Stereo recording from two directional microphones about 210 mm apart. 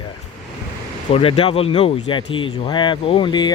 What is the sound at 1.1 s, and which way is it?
Speech, 30° left (ahead or behind).